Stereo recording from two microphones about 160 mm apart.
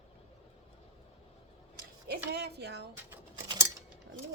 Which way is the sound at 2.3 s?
90° right.